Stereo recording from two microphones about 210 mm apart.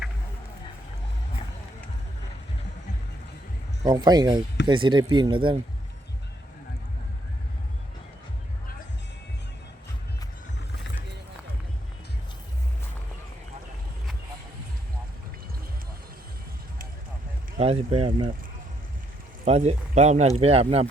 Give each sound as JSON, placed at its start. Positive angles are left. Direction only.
{"t": 3.8, "sound": "speech", "side_deg": -20}
{"t": 17.6, "sound": "speech", "side_deg": -30}
{"t": 19.5, "sound": "speech", "side_deg": -30}